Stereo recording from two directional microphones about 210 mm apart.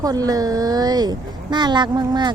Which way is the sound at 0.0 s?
15° right (ahead or behind).